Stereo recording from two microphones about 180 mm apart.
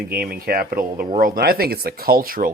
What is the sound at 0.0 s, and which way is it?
Speech, 55° right (ahead or behind).